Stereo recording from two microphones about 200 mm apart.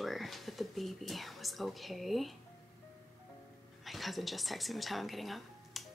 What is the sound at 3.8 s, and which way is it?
Speech, centre (ahead or behind).